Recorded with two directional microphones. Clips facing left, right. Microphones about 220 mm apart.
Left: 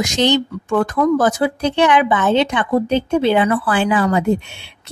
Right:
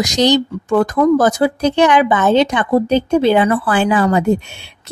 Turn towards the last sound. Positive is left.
turn(degrees=-40)  # may be behind; listen again after turning